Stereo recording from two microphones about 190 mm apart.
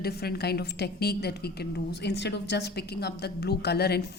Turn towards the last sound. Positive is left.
turn(degrees=55)  # may be behind; listen again after turning